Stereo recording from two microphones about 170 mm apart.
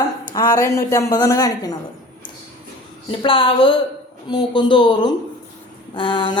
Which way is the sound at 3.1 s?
30° left (ahead or behind).